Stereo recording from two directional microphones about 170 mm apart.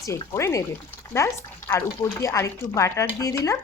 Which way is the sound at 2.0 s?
20° left (ahead or behind).